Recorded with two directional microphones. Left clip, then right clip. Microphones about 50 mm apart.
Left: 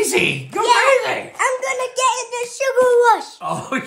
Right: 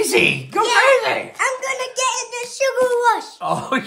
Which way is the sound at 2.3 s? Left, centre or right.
Left.